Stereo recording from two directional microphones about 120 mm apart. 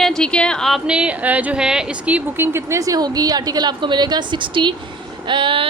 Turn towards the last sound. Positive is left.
turn(degrees=-45)  # may be behind; listen again after turning